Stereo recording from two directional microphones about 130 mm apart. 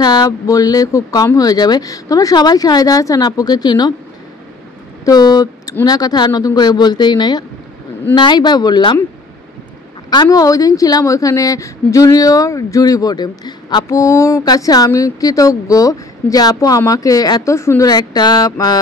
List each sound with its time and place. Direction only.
0.0 s speech: 30° left (ahead or behind)
5.0 s a woman's voice: 30° left (ahead or behind)
10.0 s speech: 30° left (ahead or behind)
17.8 s a woman's voice: 30° left (ahead or behind)